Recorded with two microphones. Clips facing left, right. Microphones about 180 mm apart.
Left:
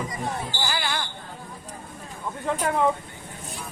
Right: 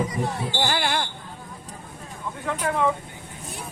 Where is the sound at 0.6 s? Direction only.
55° right (ahead or behind).